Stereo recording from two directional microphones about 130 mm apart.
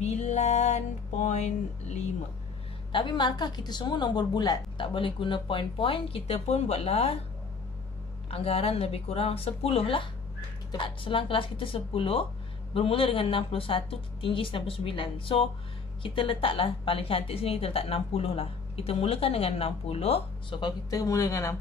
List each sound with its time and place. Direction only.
0.0 s music: 60° left (ahead or behind)
2.9 s a woman's voice: 35° left (ahead or behind)
8.3 s a woman's voice: 50° left (ahead or behind)
20.6 s speech: 25° left (ahead or behind)